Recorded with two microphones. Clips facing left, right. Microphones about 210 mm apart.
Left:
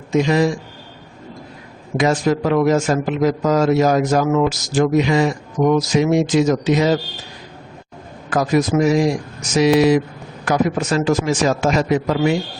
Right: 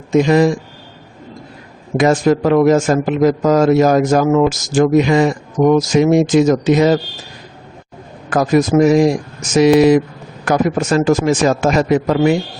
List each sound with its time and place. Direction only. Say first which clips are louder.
0.1 s a man's voice: right 4 dB; 50° right (ahead or behind)
2.0 s a man's voice: right 4 dB; 50° right (ahead or behind)
8.3 s a man's voice: right 4 dB; 50° right (ahead or behind)